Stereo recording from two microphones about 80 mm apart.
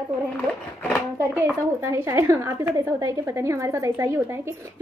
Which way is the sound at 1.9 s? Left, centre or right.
Right.